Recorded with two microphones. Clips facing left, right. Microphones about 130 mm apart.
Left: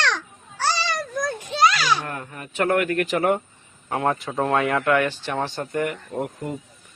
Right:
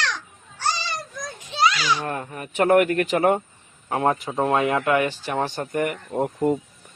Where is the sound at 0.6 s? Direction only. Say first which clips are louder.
Left 3 dB; 80° left; by 2.0 s 55° left (ahead or behind).